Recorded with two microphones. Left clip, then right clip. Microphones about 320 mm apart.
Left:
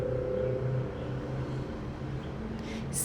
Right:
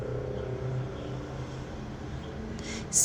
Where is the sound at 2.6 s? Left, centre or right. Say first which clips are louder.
Right 6 dB; right.